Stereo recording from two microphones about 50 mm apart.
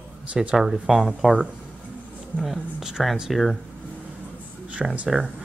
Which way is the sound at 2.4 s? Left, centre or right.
Centre.